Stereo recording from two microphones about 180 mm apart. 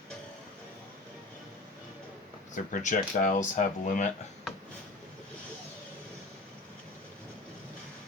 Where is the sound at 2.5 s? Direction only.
45° left (ahead or behind).